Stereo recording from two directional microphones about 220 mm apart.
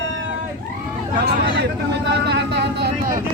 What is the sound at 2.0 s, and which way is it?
Speech, 50° right (ahead or behind).